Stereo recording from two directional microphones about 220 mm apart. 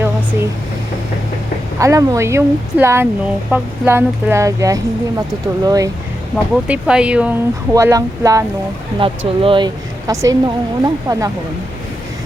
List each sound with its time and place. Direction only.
1.8 s speech: 15° right (ahead or behind)
6.3 s speech: 5° right (ahead or behind)